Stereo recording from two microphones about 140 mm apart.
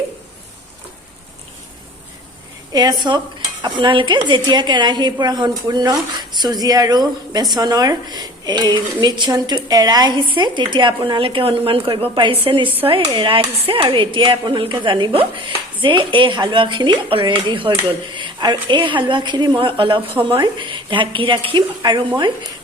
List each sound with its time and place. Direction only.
2.7 s a woman's voice: 30° right (ahead or behind)